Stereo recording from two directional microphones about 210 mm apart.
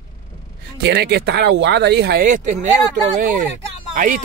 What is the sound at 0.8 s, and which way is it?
Speech, 55° right (ahead or behind).